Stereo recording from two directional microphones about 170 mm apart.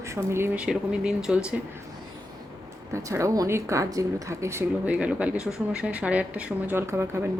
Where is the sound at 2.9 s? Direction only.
15° right (ahead or behind).